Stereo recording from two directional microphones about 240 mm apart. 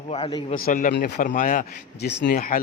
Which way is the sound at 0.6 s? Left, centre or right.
Left.